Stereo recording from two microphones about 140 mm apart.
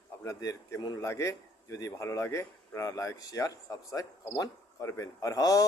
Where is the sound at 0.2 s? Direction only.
25° left (ahead or behind).